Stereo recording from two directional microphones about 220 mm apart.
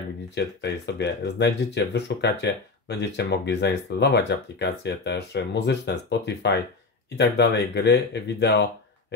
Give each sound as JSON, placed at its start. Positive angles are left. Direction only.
{"t": 0.3, "sound": "speech", "side_deg": 50}